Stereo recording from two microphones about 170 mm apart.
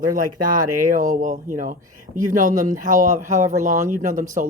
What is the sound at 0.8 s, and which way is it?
Speech, 50° right (ahead or behind).